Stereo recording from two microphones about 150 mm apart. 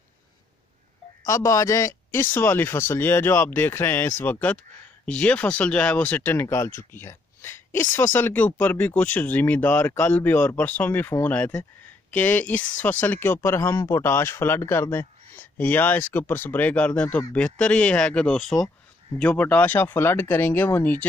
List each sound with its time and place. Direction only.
1.2 s speech: 20° left (ahead or behind)